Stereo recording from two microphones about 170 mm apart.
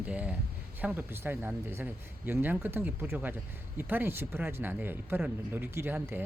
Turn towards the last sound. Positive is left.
turn(degrees=-10)  # may be behind; listen again after turning